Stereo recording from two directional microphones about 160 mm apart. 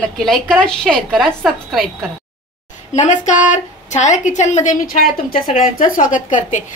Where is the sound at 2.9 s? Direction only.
50° left (ahead or behind).